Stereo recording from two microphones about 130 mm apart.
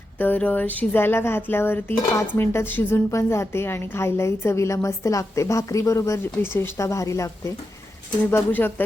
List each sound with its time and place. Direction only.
0.2 s speech: 15° left (ahead or behind)